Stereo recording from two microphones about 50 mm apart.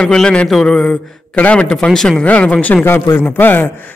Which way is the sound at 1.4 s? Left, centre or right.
Left.